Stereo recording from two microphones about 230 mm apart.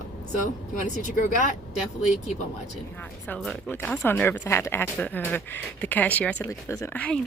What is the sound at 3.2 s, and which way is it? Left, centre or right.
Speech, centre.